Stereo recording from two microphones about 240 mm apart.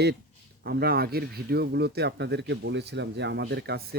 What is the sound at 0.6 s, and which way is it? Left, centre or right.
Speech, right.